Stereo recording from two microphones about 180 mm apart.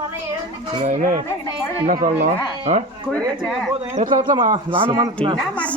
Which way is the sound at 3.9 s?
45° right (ahead or behind).